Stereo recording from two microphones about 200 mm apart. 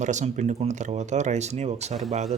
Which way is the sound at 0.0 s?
35° right (ahead or behind).